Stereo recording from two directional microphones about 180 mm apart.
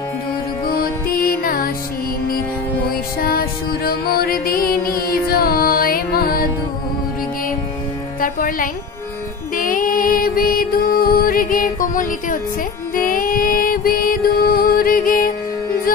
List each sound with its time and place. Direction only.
0.7 s music: 55° left (ahead or behind)
2.9 s music: 55° left (ahead or behind)
8.2 s music: 50° left (ahead or behind)